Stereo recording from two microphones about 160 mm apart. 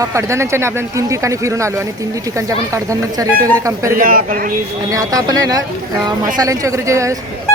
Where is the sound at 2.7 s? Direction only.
20° right (ahead or behind).